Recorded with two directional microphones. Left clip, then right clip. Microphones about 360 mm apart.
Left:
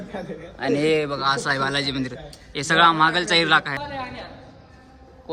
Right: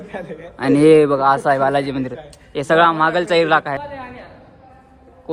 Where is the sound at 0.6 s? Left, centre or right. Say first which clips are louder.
Right 10 dB; centre.